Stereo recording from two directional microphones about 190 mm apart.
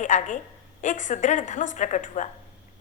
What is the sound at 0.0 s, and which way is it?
A woman's voice, 40° left (ahead or behind).